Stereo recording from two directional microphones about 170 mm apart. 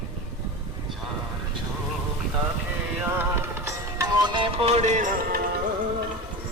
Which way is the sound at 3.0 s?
15° right (ahead or behind).